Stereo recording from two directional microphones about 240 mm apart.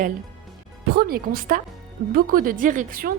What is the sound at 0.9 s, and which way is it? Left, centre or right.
A woman's voice, right.